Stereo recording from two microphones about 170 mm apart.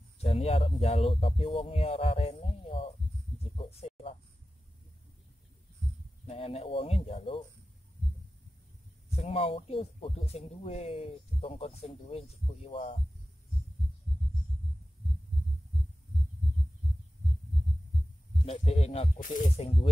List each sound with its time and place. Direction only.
0.2 s speech: 35° left (ahead or behind)
3.5 s a sound: 35° left (ahead or behind)
6.2 s speech: 35° left (ahead or behind)
9.1 s speech: 35° left (ahead or behind)
18.4 s speech: 35° left (ahead or behind)